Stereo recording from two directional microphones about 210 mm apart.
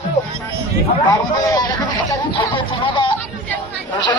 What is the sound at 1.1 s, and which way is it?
Speech, 15° left (ahead or behind).